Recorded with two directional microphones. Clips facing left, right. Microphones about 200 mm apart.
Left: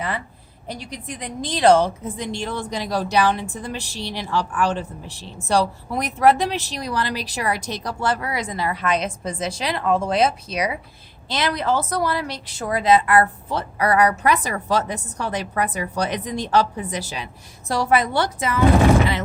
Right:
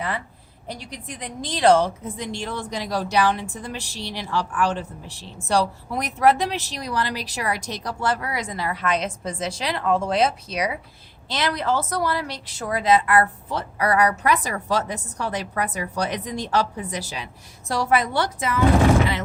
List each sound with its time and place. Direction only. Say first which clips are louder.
0.9 s a woman's voice: left 3 dB; 20° left (ahead or behind)